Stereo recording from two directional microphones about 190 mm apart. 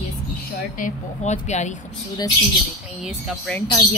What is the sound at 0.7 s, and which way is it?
Speech, 40° left (ahead or behind).